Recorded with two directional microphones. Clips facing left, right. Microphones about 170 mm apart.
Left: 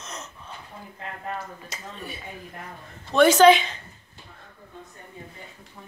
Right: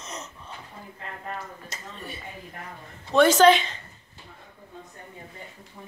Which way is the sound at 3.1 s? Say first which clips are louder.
Left 2 dB; centre (ahead or behind).